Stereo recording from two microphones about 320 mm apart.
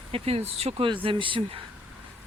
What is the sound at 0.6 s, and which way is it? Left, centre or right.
Speech, centre.